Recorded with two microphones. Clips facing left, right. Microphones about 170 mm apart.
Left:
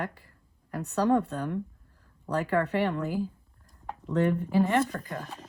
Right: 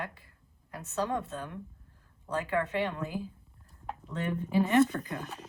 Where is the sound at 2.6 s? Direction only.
65° left (ahead or behind).